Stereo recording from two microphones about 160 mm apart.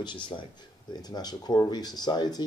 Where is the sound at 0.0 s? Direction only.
30° left (ahead or behind).